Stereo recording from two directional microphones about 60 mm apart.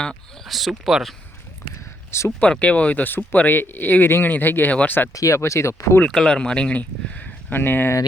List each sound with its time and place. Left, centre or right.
0.4 s speech: centre
2.0 s speech: left
2.4 s speech: left
5.1 s speech: left
5.4 s speech: left
6.1 s speech: centre
7.5 s speech: left